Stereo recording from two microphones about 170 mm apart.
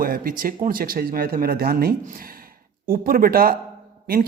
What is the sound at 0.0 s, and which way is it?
Speech, 55° right (ahead or behind).